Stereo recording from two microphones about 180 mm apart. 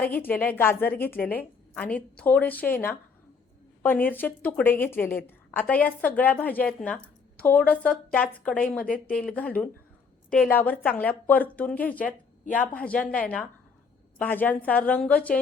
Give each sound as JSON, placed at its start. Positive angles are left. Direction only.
{"t": 0.2, "sound": "a woman's voice", "side_deg": 10}
{"t": 8.8, "sound": "speech", "side_deg": 50}
{"t": 9.1, "sound": "a woman's voice", "side_deg": 5}